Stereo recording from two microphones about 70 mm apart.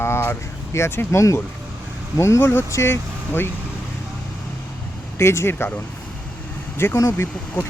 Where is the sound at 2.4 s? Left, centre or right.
Left.